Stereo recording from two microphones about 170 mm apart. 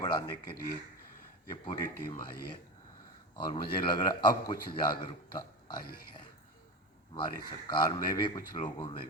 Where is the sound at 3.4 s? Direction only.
25° left (ahead or behind).